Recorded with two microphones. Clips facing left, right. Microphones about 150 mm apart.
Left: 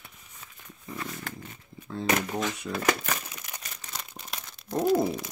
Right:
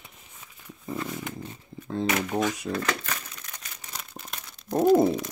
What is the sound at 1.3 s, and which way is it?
Dog, 20° right (ahead or behind).